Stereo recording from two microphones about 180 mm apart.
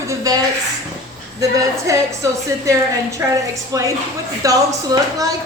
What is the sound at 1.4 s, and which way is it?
A woman's voice, 20° right (ahead or behind).